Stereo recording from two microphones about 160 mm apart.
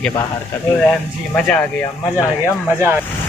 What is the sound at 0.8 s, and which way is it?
Speech, 5° left (ahead or behind).